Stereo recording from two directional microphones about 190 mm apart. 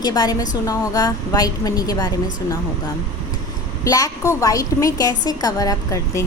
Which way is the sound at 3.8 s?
20° left (ahead or behind).